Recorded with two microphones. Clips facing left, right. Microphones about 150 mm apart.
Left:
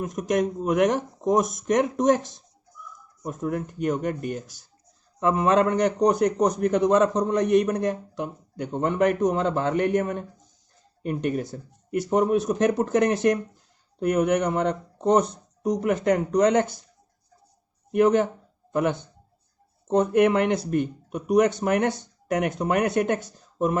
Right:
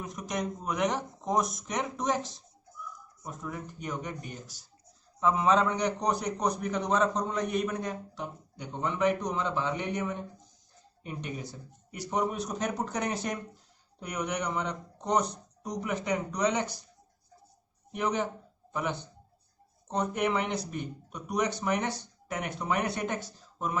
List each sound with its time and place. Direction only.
0.0 s speech: 50° left (ahead or behind)
7.2 s a man's voice: 75° left (ahead or behind)
8.5 s speech: 50° left (ahead or behind)
17.9 s speech: 50° left (ahead or behind)